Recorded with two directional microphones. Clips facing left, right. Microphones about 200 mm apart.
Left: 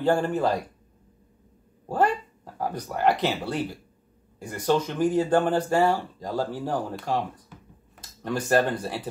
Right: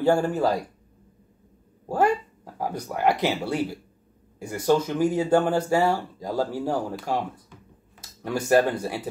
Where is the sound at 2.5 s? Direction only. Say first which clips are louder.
Even; 10° right (ahead or behind).